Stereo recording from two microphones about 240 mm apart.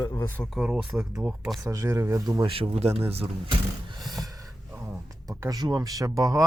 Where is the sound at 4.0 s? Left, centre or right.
Centre.